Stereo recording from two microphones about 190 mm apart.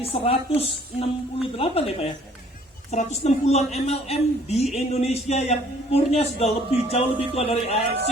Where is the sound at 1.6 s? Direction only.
30° left (ahead or behind).